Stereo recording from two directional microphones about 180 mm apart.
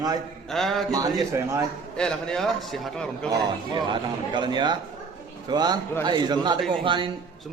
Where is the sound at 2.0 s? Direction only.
5° left (ahead or behind).